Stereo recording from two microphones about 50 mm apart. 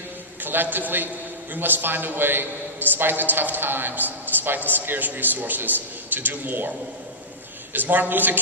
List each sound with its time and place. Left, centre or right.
0.4 s a man's voice: right
7.7 s a man's voice: right